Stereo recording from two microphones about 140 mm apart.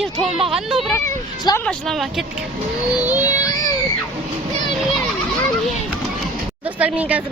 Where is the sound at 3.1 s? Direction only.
10° right (ahead or behind).